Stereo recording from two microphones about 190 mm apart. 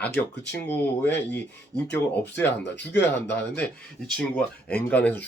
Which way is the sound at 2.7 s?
65° left (ahead or behind).